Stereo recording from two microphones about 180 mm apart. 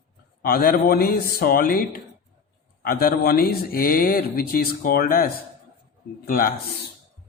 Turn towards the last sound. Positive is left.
turn(degrees=50)  # may be behind; listen again after turning